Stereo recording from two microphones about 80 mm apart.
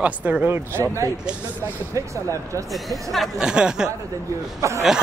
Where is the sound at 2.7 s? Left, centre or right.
Centre.